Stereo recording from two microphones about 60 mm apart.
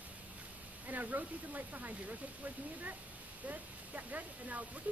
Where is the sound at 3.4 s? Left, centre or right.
Right.